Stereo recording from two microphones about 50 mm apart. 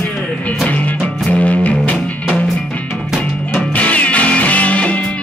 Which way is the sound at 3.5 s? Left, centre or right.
Left.